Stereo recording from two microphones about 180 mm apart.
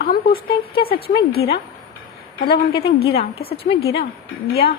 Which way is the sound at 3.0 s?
60° left (ahead or behind).